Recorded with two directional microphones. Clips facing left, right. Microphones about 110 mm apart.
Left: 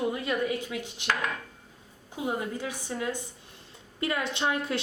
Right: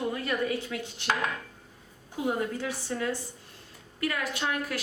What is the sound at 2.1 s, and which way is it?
Speech, 15° left (ahead or behind).